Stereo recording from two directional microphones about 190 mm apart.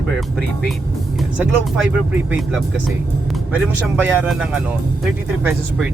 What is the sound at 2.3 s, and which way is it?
Speech, 5° right (ahead or behind).